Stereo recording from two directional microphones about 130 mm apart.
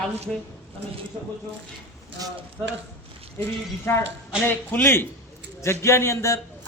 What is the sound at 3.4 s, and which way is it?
Speech, 20° left (ahead or behind).